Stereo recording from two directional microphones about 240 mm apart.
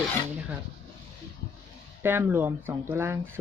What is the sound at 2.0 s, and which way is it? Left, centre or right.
Speech, centre.